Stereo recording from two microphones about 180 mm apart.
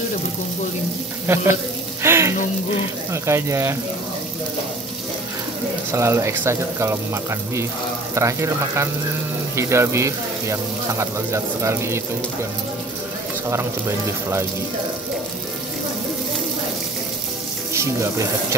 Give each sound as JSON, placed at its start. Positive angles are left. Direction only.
{"t": 1.2, "sound": "frying", "side_deg": -15}
{"t": 2.0, "sound": "music", "side_deg": -15}
{"t": 3.1, "sound": "speech", "side_deg": -15}
{"t": 5.9, "sound": "speech", "side_deg": -15}
{"t": 13.5, "sound": "speech", "side_deg": -15}